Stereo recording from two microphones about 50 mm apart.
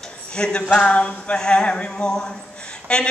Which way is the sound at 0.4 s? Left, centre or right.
Centre.